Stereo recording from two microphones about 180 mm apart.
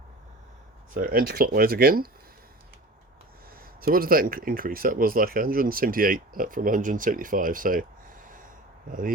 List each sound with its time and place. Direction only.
0.9 s speech: 50° right (ahead or behind)
3.8 s speech: 55° right (ahead or behind)